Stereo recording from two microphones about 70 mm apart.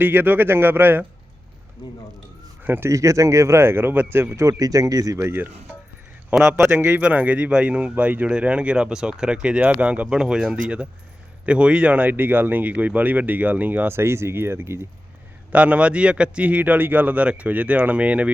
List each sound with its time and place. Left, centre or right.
0.0 s speech: right
2.6 s speech: right
2.9 s speech: right
4.4 s speech: right
5.1 s speech: right
6.3 s speech: centre; by 14.8 s right
15.5 s speech: centre